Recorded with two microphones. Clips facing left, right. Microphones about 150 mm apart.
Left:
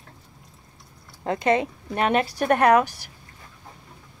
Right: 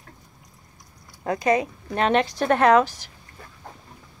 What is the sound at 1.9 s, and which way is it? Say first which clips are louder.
A woman's voice: right 1 dB; 10° left (ahead or behind).